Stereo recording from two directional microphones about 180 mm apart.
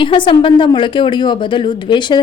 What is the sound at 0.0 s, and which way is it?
A woman's voice, 30° left (ahead or behind).